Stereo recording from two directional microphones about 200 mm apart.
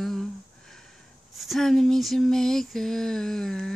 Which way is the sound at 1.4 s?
Centre (ahead or behind).